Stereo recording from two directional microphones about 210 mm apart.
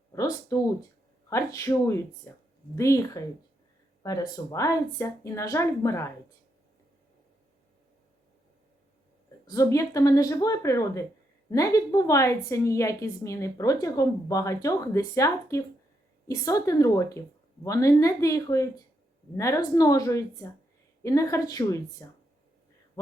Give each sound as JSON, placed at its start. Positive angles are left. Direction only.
{"t": 0.1, "sound": "a woman's voice", "side_deg": 15}
{"t": 9.5, "sound": "a woman's voice", "side_deg": 15}